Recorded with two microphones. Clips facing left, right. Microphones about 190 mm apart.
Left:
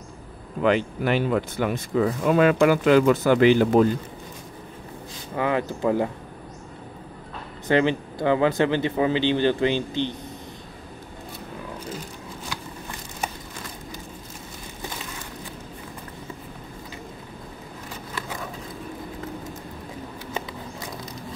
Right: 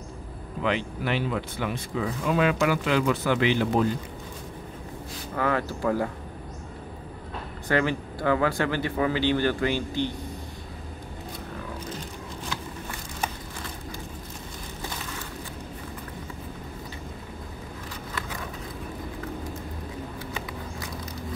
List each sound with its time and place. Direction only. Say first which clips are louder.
0.6 s speech: left 6 dB; 50° left (ahead or behind)
5.3 s a man's voice: left 2 dB; 20° left (ahead or behind)
7.6 s a man's voice: left 4 dB; 20° left (ahead or behind)